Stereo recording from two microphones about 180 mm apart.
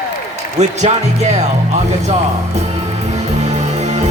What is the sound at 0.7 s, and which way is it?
Music, 40° right (ahead or behind).